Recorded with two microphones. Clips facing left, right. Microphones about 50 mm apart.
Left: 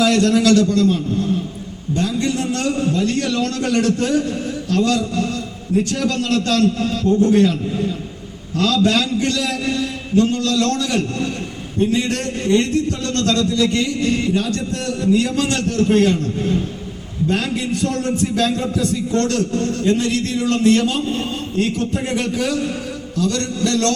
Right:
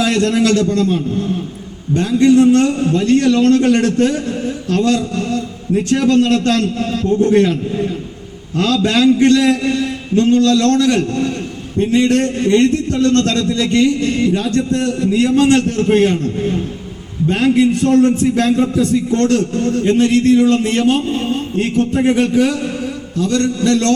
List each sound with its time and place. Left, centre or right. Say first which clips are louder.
0.0 s a man's voice: even; right
8.5 s a man's voice: right 2 dB; right
17.2 s a man's voice: right 8 dB; right